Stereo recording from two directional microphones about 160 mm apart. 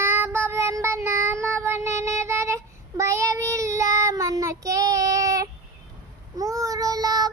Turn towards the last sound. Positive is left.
turn(degrees=-25)  # may be behind; listen again after turning